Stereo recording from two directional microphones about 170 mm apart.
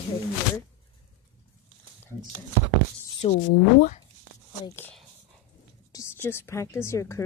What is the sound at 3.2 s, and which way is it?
Speech, 35° left (ahead or behind).